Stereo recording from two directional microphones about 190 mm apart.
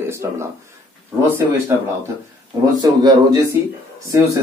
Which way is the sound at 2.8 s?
20° right (ahead or behind).